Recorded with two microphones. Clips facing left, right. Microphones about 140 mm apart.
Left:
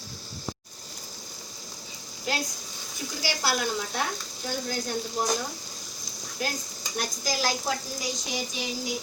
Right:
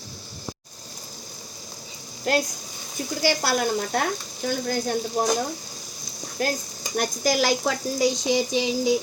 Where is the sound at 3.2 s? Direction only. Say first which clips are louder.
Right 6 dB; 50° right (ahead or behind).